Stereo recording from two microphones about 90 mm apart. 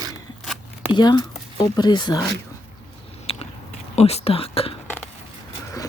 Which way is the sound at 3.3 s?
90° left.